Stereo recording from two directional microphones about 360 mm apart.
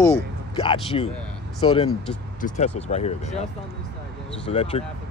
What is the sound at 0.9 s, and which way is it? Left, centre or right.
Speech, centre.